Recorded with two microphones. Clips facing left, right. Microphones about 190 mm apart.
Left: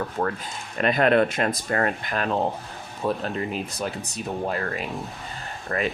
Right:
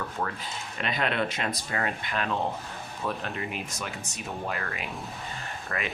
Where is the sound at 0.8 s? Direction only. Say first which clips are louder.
Left 10 dB; 50° left (ahead or behind).